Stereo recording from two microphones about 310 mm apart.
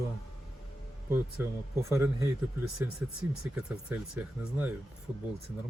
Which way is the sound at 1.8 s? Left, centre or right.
Centre.